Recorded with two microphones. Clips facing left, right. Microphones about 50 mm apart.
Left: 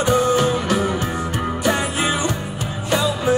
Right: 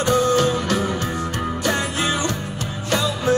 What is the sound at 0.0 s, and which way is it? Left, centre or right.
Music, centre.